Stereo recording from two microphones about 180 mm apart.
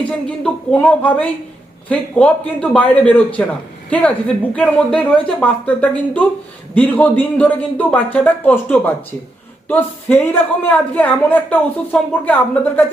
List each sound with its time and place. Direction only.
0.1 s a woman's voice: 5° left (ahead or behind)